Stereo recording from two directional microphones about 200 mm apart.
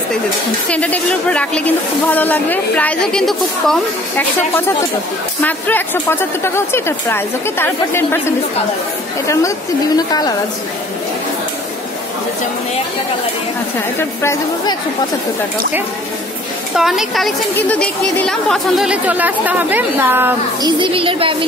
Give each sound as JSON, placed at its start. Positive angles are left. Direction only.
{"t": 0.7, "sound": "speech", "side_deg": 5}
{"t": 9.9, "sound": "a woman's voice", "side_deg": 20}
{"t": 13.9, "sound": "speech", "side_deg": 15}
{"t": 16.7, "sound": "a woman's voice", "side_deg": 0}
{"t": 20.6, "sound": "speech", "side_deg": -25}